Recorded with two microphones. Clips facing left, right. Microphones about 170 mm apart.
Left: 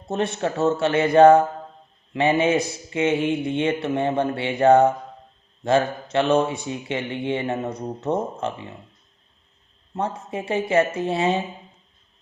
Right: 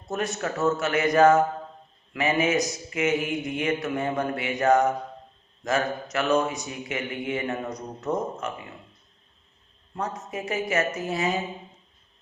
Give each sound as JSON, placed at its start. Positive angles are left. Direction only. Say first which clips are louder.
{"t": 0.1, "sound": "speech", "louder": "left 4 dB", "side_deg": 25}
{"t": 9.9, "sound": "speech", "louder": "left 4 dB", "side_deg": 30}